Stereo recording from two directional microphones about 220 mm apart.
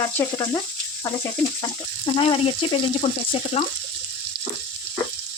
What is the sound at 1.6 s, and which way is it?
Speech, 25° left (ahead or behind).